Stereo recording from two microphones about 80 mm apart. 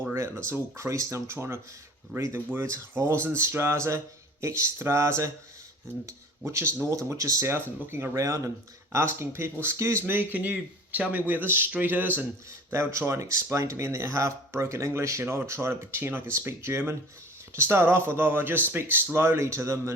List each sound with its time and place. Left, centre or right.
0.4 s speech: right
8.1 s speech: right
8.9 s speech: right